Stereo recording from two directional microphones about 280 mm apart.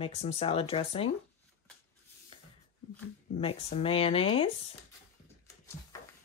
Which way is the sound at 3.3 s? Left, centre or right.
Left.